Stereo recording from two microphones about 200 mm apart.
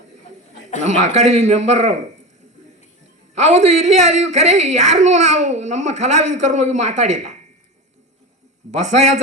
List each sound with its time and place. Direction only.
0.8 s a child's voice: 35° right (ahead or behind)
3.4 s a child's voice: 35° right (ahead or behind)
8.8 s a child's voice: 35° right (ahead or behind)